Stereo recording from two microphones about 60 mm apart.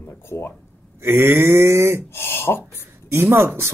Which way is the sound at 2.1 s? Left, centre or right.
Left.